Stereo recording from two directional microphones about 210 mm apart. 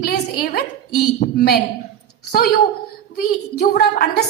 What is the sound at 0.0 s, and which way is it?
A woman's voice, 45° left (ahead or behind).